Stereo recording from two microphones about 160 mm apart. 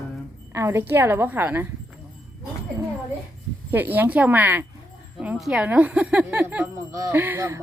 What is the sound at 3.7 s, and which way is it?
Speech, 10° right (ahead or behind).